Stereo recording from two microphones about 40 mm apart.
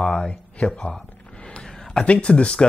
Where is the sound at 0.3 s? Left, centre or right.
Left.